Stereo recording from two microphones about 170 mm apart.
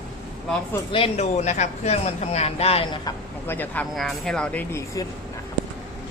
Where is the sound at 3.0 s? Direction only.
10° left (ahead or behind).